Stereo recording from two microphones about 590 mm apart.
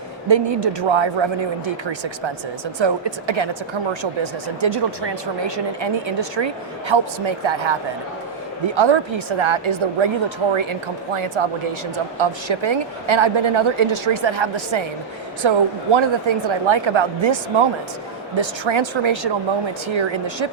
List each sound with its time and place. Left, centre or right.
0.3 s speech: right
12.5 s speech: right
18.3 s speech: right